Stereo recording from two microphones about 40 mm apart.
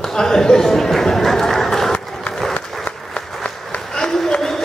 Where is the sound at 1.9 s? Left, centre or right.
Centre.